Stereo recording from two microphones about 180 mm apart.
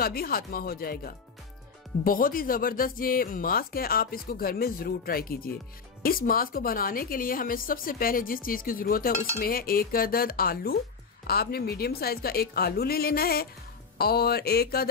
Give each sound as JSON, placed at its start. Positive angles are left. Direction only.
{"t": 0.0, "sound": "a woman's voice", "side_deg": 55}